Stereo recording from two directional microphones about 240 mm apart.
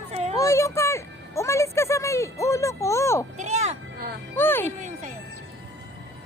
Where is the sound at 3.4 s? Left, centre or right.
Right.